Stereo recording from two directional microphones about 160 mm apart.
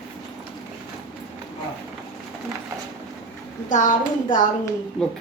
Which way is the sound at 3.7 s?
55° left (ahead or behind).